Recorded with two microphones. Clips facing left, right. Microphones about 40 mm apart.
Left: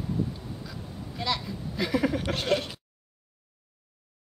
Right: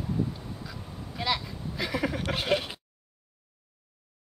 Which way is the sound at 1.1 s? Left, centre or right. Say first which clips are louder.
Right 1 dB; centre.